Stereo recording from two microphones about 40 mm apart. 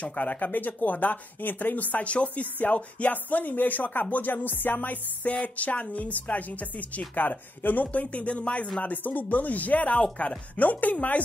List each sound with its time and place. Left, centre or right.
0.0 s speech: left
8.8 s speech: left